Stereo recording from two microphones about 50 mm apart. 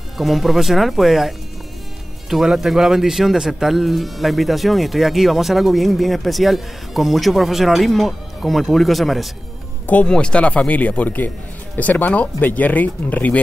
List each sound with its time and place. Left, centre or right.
0.2 s speech: centre
10.0 s a man's voice: left